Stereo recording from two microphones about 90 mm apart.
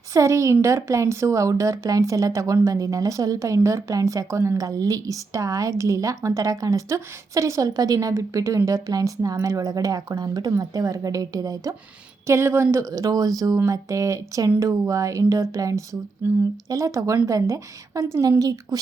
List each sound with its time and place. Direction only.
0.1 s speech: 35° right (ahead or behind)
12.2 s speech: 30° right (ahead or behind)